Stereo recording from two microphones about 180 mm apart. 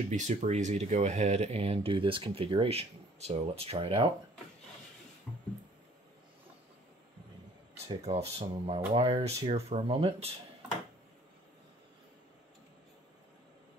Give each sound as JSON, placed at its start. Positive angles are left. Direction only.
{"t": 0.1, "sound": "speech", "side_deg": -40}
{"t": 8.0, "sound": "speech", "side_deg": -35}